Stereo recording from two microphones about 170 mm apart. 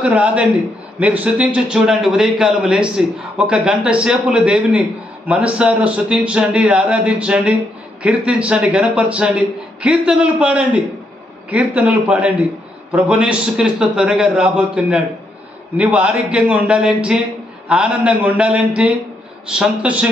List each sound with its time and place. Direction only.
0.0 s a man's voice: 5° right (ahead or behind)